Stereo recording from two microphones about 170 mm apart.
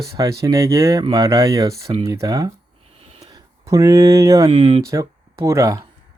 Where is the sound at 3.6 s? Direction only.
20° right (ahead or behind).